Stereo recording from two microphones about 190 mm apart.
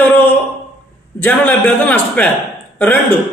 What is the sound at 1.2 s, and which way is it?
Speech, 10° left (ahead or behind).